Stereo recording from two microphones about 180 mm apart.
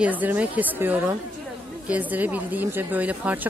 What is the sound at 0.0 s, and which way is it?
Speech, 10° right (ahead or behind).